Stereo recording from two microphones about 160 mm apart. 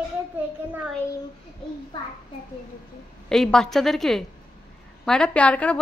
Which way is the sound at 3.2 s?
5° left (ahead or behind).